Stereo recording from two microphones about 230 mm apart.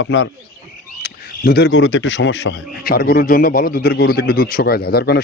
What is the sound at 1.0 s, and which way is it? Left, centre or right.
Speech, left.